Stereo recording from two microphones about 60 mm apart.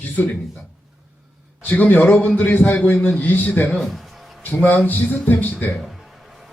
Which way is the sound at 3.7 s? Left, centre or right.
Centre.